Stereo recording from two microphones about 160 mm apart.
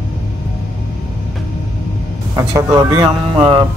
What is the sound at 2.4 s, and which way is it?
Speech, 20° right (ahead or behind).